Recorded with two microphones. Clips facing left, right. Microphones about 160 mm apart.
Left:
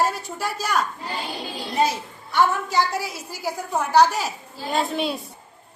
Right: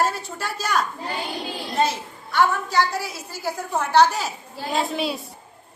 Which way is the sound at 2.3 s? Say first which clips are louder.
Even; 15° left (ahead or behind).